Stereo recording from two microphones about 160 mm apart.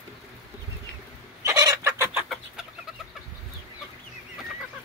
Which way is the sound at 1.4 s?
20° right (ahead or behind).